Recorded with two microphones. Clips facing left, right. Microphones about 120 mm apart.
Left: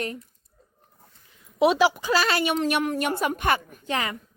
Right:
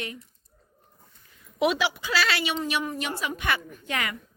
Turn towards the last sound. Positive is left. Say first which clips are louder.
# left 5 dB
turn(degrees=45)  # may be behind; listen again after turning